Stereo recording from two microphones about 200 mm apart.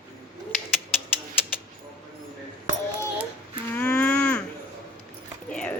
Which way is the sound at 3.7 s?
5° left (ahead or behind).